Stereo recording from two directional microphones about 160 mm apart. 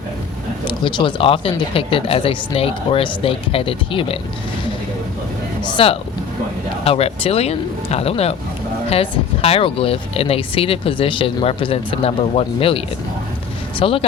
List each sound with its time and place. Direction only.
0.7 s speech: 30° left (ahead or behind)
5.6 s speech: 35° left (ahead or behind)